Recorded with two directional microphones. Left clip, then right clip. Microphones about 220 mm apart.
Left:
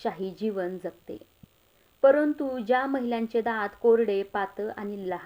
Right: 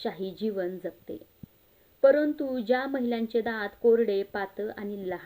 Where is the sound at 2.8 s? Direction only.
15° left (ahead or behind).